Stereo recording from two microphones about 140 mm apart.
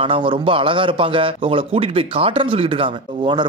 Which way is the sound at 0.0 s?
40° right (ahead or behind).